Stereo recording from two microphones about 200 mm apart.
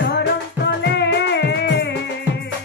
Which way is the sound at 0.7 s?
60° left (ahead or behind).